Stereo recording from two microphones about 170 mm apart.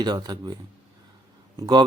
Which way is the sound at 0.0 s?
25° right (ahead or behind).